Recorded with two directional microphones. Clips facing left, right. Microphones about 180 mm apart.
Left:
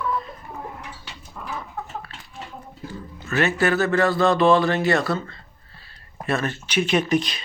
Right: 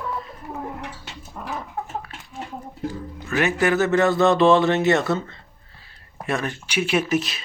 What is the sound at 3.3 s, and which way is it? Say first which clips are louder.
Speech: even; 15° right (ahead or behind).